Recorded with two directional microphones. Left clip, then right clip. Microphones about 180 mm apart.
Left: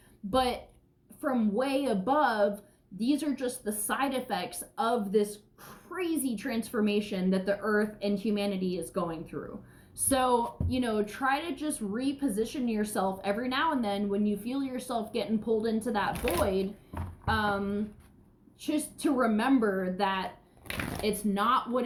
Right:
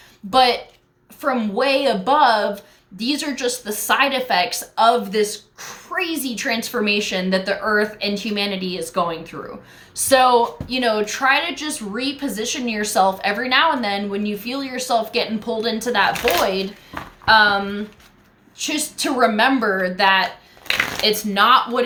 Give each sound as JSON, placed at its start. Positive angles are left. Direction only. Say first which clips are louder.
{"t": 0.3, "sound": "a woman's voice", "louder": "right 13 dB", "side_deg": -15}
{"t": 16.9, "sound": "a sound", "louder": "right 11 dB", "side_deg": 25}
{"t": 17.2, "sound": "a woman's voice", "louder": "right 15 dB", "side_deg": -20}